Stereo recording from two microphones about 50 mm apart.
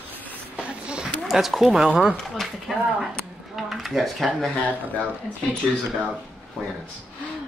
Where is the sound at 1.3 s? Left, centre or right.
Centre.